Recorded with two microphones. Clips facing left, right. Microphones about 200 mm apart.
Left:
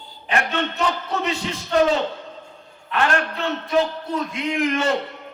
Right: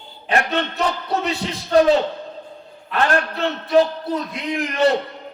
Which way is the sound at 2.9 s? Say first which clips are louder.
Right 2 dB; 35° right (ahead or behind).